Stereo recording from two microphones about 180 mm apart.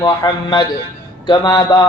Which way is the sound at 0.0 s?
25° left (ahead or behind).